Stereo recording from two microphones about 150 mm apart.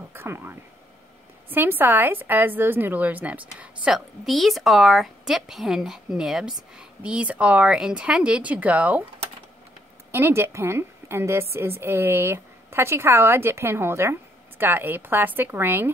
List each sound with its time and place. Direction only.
0.1 s speech: 15° right (ahead or behind)
10.1 s speech: 15° right (ahead or behind)